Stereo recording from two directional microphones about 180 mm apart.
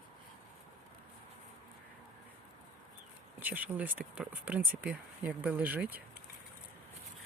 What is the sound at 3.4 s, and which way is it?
Speech, 10° right (ahead or behind).